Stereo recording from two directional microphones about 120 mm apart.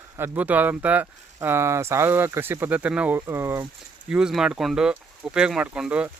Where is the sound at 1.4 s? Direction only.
20° right (ahead or behind).